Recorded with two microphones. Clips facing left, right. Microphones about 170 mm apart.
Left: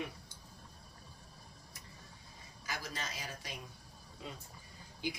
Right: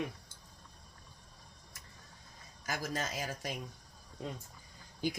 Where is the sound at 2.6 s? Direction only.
45° right (ahead or behind).